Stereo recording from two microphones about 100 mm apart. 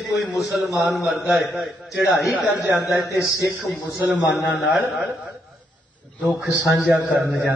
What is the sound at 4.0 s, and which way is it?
Speech, 15° right (ahead or behind).